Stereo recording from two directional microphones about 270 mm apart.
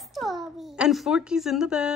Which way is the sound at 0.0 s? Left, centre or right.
Centre.